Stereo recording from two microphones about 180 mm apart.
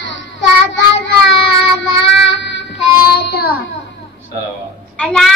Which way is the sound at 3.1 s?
60° left (ahead or behind).